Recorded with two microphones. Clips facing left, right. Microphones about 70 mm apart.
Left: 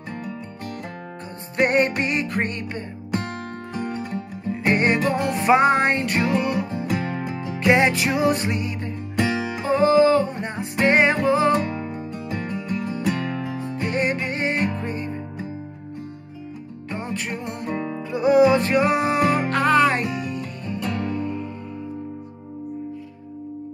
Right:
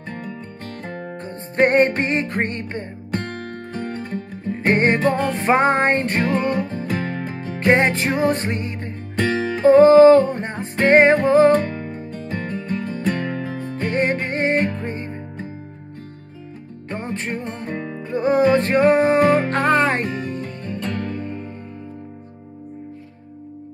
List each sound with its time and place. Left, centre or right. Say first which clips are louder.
1.6 s music: right 4 dB; right
3.8 s music: even; right
9.3 s music: right 4 dB; centre
9.6 s music: right 8 dB; right
11.5 s music: right 3 dB; centre
12.4 s music: right 1 dB; right
16.9 s music: right 2 dB; right
20.8 s music: left 1 dB; centre
21.2 s music: left 2 dB; right